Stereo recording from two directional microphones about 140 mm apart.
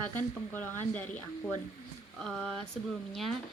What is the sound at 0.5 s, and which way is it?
Speech, 15° left (ahead or behind).